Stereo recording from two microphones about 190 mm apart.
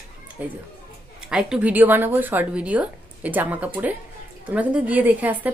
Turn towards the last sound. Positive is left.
turn(degrees=-10)  # may be behind; listen again after turning